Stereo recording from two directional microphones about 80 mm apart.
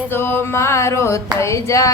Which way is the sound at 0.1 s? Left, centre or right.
Left.